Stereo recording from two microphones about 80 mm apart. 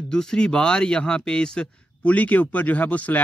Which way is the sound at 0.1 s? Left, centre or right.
Centre.